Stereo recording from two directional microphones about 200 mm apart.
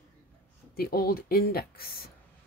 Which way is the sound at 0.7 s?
50° left (ahead or behind).